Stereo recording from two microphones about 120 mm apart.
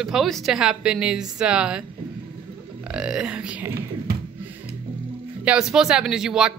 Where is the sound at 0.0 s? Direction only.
Centre (ahead or behind).